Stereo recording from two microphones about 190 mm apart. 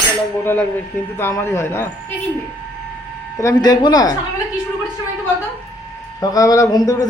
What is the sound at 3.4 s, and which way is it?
Speech, 20° left (ahead or behind).